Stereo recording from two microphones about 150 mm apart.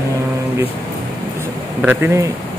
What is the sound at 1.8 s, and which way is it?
Speech, 15° right (ahead or behind).